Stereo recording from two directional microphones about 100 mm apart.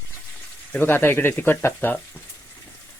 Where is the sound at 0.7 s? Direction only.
20° left (ahead or behind).